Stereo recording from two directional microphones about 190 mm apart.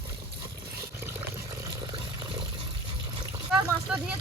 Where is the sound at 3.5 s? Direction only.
5° right (ahead or behind).